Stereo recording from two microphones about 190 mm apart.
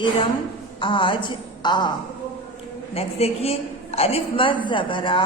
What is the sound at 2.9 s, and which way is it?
A woman's voice, 30° left (ahead or behind).